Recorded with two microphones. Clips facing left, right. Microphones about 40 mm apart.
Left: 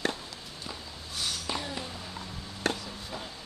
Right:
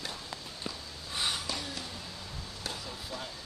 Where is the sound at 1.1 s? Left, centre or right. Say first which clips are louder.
Right 2 dB; right.